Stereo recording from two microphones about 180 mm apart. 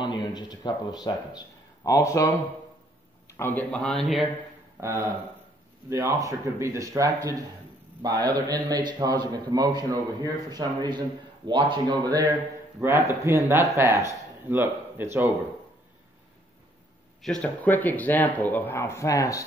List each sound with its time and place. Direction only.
0.0 s a man's voice: 25° left (ahead or behind); by 4.3 s centre (ahead or behind)
4.7 s a man's voice: 15° right (ahead or behind)
17.2 s speech: 5° left (ahead or behind)